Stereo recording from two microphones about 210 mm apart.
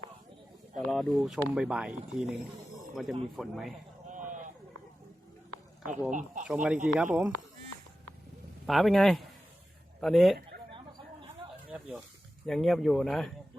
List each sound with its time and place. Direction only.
0.9 s speech: centre (ahead or behind)
2.7 s snake: centre (ahead or behind)
3.3 s speech: centre (ahead or behind)
4.1 s a sound: 35° right (ahead or behind)
6.1 s speech: 35° right (ahead or behind)
6.4 s speech: 5° right (ahead or behind)
8.6 s speech: centre (ahead or behind)
11.7 s speech: 5° right (ahead or behind)